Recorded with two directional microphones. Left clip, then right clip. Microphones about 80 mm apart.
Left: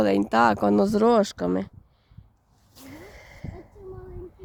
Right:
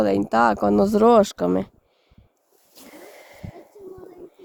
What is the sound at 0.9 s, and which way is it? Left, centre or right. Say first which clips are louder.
Speech: right 5 dB; right.